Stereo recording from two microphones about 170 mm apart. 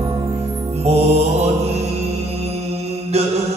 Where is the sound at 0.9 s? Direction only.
40° right (ahead or behind).